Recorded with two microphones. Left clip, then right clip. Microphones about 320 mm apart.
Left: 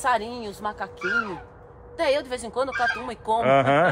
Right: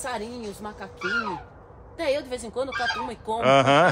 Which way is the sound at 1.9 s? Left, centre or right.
Centre.